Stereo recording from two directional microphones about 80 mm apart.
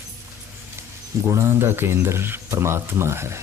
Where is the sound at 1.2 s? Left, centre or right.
Right.